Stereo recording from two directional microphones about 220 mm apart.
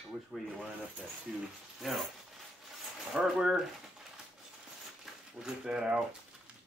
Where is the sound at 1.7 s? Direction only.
Centre (ahead or behind).